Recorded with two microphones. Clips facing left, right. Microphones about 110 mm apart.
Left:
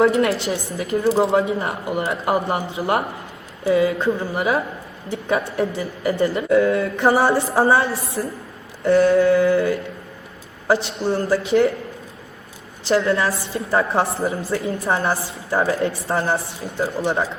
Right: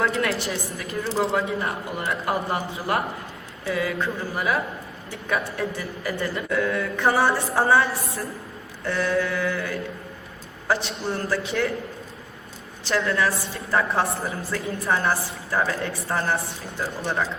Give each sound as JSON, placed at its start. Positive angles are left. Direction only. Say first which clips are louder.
{"t": 0.0, "sound": "speech", "louder": "left 7 dB", "side_deg": 25}
{"t": 12.9, "sound": "speech", "louder": "left 5 dB", "side_deg": 25}